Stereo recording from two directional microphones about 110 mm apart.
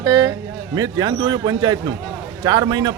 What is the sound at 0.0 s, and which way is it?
Speech, 30° right (ahead or behind).